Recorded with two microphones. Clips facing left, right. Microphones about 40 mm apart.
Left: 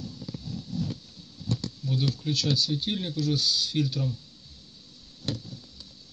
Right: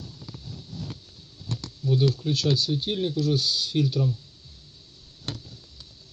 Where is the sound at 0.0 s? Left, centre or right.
Right.